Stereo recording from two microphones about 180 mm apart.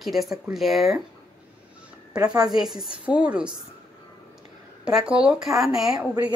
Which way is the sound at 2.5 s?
Centre (ahead or behind).